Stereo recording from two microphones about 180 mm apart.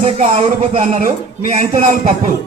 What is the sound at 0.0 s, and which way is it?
Speech, 35° right (ahead or behind).